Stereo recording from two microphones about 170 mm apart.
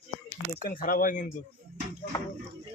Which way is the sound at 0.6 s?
55° left (ahead or behind).